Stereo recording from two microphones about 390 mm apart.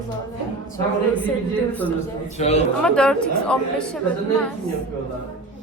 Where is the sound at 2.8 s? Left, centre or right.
Centre.